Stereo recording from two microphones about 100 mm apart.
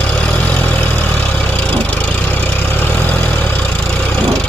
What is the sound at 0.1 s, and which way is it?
Vehicle, 15° left (ahead or behind).